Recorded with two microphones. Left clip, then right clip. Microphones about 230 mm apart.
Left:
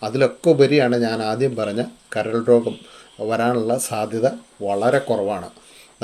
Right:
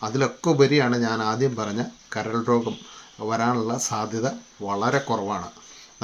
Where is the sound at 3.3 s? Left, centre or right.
Centre.